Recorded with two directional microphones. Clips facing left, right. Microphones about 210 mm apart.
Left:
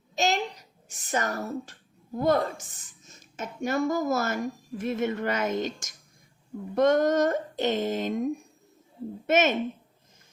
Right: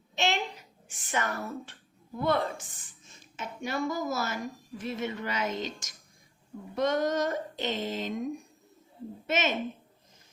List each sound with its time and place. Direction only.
0.2 s a child's voice: 40° left (ahead or behind)